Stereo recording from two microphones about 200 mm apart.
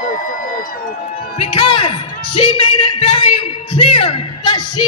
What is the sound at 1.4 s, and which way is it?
A man's voice, 25° left (ahead or behind).